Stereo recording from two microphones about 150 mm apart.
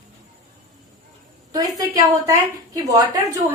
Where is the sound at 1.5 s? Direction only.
25° right (ahead or behind).